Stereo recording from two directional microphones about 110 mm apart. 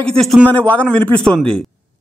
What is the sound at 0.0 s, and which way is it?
Speech, centre (ahead or behind).